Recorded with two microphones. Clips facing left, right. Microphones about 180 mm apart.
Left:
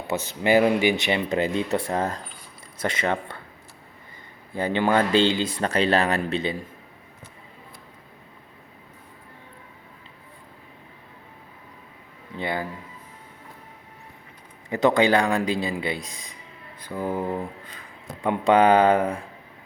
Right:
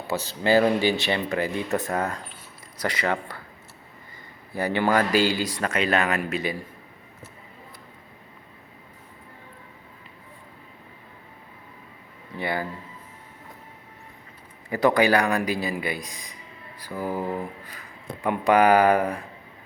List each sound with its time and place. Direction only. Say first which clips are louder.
0.1 s speech: left 1 dB; 20° left (ahead or behind)
4.5 s speech: left 1 dB; 20° left (ahead or behind)
12.4 s speech: even; 20° left (ahead or behind)
14.7 s speech: left 1 dB; 20° left (ahead or behind)
16.0 s speech: even; 20° right (ahead or behind)
16.8 s speech: left 1 dB; 20° left (ahead or behind)